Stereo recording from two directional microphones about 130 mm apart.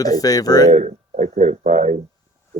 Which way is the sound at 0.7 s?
60° right (ahead or behind).